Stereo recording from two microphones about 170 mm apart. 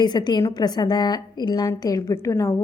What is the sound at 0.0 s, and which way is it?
A woman's voice, 25° left (ahead or behind).